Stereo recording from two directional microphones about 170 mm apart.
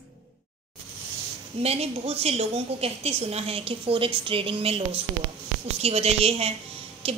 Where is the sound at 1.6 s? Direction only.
35° right (ahead or behind).